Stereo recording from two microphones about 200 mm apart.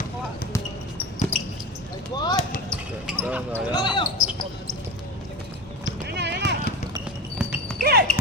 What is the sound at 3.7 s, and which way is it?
Speech, 20° left (ahead or behind).